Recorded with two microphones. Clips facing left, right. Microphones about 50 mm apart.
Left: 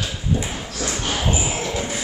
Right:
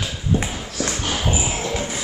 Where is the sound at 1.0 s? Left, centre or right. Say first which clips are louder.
Left 2 dB; centre.